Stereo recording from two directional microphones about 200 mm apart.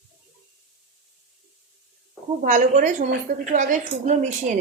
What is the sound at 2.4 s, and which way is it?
A woman's voice, 40° right (ahead or behind).